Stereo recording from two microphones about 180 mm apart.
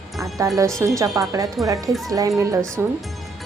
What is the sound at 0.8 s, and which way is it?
A woman's voice, 15° right (ahead or behind).